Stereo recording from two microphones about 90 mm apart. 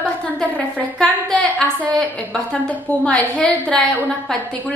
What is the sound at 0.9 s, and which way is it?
A woman's voice, 10° left (ahead or behind).